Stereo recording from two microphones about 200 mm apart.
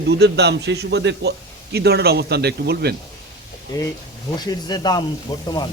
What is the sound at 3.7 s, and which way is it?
A man's voice, 20° left (ahead or behind).